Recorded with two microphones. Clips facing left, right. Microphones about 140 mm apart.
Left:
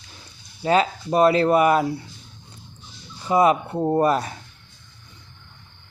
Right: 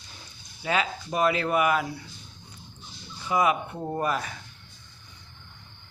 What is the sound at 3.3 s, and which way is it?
Speech, 35° left (ahead or behind).